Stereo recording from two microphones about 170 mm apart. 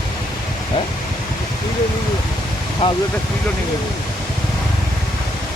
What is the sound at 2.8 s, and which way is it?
Speech, 35° left (ahead or behind).